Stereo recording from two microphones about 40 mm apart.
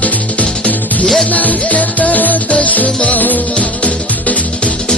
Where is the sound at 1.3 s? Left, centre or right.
Left.